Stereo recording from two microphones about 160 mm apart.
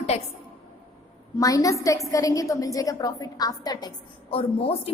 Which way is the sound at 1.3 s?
20° left (ahead or behind).